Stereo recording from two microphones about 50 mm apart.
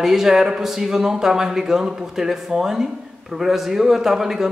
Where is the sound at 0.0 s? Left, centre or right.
Centre.